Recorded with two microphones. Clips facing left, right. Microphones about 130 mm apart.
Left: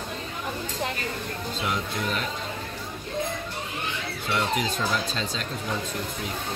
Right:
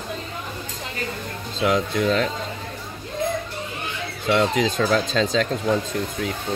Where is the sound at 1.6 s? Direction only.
90° right.